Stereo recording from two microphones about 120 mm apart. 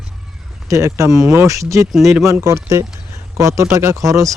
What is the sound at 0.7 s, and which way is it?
Speech, 25° right (ahead or behind).